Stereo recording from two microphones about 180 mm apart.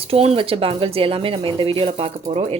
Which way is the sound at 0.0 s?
35° right (ahead or behind).